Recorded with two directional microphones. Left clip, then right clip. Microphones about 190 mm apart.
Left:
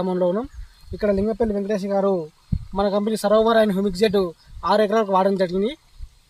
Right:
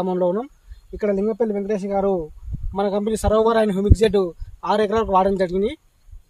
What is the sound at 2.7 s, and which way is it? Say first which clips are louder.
Speech: even; 40° right (ahead or behind).